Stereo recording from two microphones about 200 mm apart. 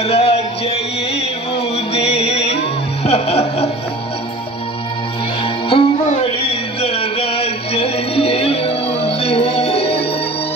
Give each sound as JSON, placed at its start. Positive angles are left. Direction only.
{"t": 0.0, "sound": "music", "side_deg": 30}
{"t": 5.4, "sound": "music", "side_deg": 25}